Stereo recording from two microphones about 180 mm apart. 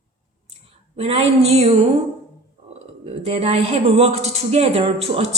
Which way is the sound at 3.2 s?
35° right (ahead or behind).